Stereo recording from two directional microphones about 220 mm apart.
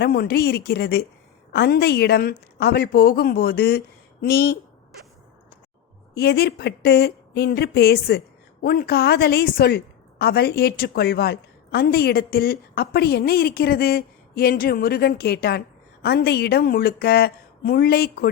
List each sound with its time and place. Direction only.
0.0 s a woman's voice: 45° left (ahead or behind)
6.1 s a woman's voice: 45° left (ahead or behind)